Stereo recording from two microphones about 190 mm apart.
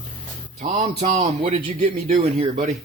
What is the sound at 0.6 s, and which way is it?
Speech, 35° right (ahead or behind).